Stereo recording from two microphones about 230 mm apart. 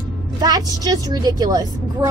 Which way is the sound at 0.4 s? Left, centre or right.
Centre.